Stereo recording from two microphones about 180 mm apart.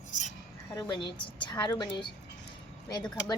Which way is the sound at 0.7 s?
25° left (ahead or behind).